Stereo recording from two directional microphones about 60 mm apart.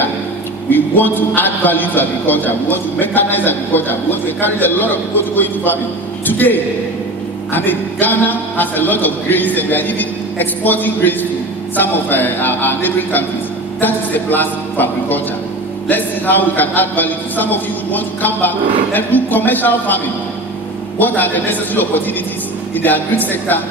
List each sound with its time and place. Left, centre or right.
0.7 s a man's voice: left
21.0 s a man's voice: left